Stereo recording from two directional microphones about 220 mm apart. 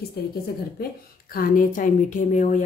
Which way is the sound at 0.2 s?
45° left (ahead or behind).